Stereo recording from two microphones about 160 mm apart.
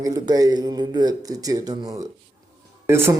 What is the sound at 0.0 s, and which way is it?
A man's voice, 25° right (ahead or behind).